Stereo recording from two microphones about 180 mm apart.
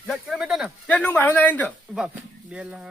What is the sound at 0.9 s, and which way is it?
Speech, 10° left (ahead or behind).